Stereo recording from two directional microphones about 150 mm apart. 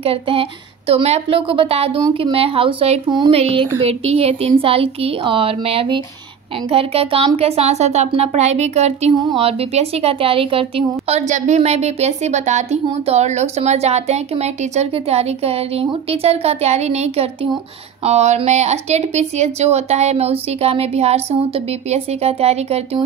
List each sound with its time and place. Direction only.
0.0 s a woman's voice: 40° right (ahead or behind)
2.0 s speech: 25° right (ahead or behind)
2.3 s a woman's voice: 40° right (ahead or behind)